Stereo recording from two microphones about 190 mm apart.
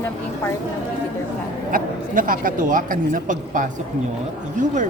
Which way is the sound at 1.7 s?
45° right (ahead or behind).